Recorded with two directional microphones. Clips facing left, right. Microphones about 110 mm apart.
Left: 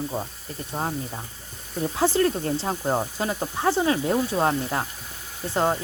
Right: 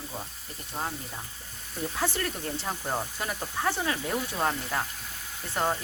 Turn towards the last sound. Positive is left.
turn(degrees=25)  # may be behind; listen again after turning